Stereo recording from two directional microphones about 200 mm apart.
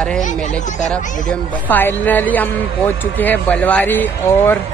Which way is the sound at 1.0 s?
40° left (ahead or behind).